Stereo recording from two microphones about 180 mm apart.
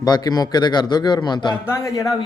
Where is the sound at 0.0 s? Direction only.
20° left (ahead or behind).